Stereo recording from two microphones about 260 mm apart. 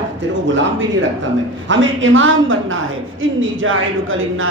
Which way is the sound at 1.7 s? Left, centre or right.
Right.